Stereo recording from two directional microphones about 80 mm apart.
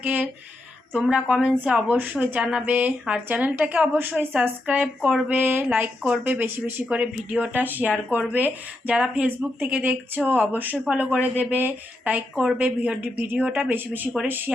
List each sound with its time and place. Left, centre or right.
1.1 s a woman's voice: centre
10.8 s a woman's voice: centre